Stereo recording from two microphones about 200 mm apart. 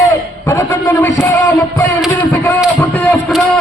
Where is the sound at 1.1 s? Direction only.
10° left (ahead or behind).